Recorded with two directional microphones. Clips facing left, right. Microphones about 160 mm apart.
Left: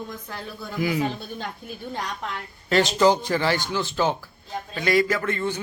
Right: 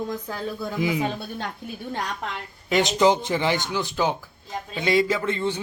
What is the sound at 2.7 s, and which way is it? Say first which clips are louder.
A man's voice: even; 20° right (ahead or behind).